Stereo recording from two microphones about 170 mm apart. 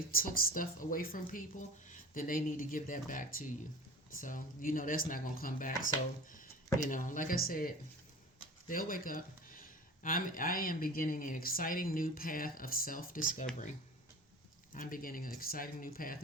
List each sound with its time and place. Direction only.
0.1 s speech: 55° left (ahead or behind)
6.2 s a sound: 50° left (ahead or behind)
6.8 s speech: 50° left (ahead or behind)
14.7 s speech: 55° left (ahead or behind)